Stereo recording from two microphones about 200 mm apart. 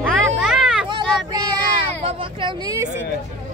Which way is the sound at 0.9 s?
20° right (ahead or behind).